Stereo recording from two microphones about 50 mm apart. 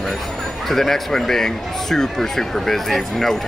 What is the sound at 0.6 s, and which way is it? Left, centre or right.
Speech, centre.